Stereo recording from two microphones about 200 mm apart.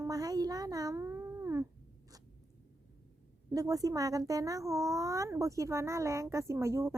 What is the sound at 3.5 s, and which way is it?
Speech, 15° right (ahead or behind).